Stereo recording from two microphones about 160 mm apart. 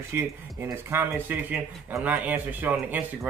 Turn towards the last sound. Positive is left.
turn(degrees=-10)  # may be behind; listen again after turning